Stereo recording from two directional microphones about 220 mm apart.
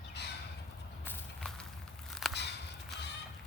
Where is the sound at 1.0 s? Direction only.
5° left (ahead or behind).